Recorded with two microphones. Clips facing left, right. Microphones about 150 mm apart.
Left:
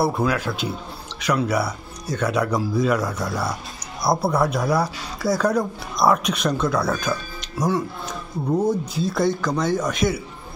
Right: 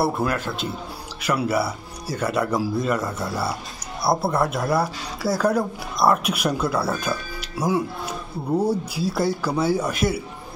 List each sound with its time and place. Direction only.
0.0 s speech: 5° right (ahead or behind)